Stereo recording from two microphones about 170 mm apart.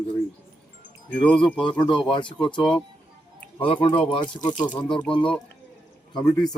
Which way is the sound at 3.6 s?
30° left (ahead or behind).